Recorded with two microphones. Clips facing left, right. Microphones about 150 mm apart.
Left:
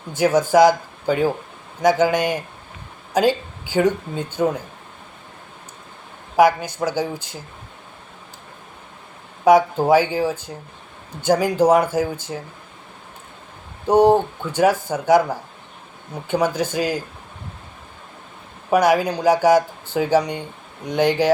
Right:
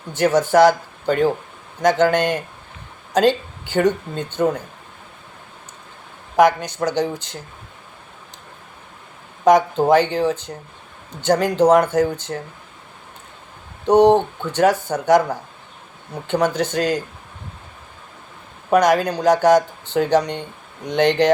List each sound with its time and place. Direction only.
0.2 s speech: 10° left (ahead or behind)
6.3 s speech: 5° left (ahead or behind)
9.4 s speech: 5° left (ahead or behind)
14.0 s speech: 5° left (ahead or behind)
18.7 s speech: 5° left (ahead or behind)